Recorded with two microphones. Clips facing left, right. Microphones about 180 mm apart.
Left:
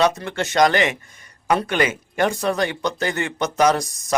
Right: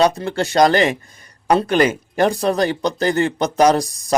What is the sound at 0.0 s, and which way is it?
Speech, 35° right (ahead or behind).